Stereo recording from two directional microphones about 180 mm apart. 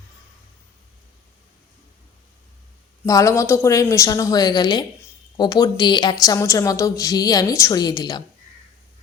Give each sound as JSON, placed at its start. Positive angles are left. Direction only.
{"t": 3.1, "sound": "a woman's voice", "side_deg": 15}